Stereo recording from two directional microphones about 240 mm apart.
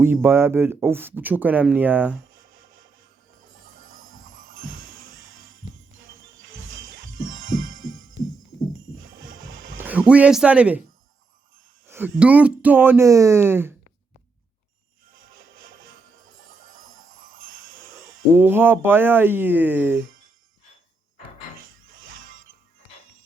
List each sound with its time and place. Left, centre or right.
0.0 s speech: centre
2.5 s music: right
9.1 s music: right
9.7 s speech: centre
11.9 s a sound: centre
12.2 s speech: centre
15.5 s music: right
17.1 s jingle bell: right
18.3 s speech: centre